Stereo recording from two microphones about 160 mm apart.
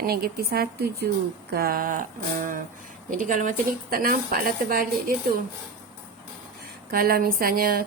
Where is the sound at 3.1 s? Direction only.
55° right (ahead or behind).